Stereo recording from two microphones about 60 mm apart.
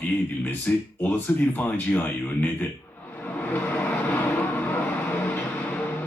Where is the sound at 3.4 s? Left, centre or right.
Left.